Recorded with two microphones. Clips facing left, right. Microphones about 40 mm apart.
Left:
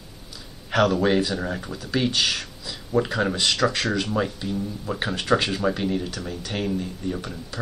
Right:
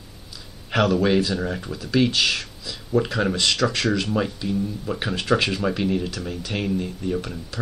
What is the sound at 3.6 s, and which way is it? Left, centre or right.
Speech, centre.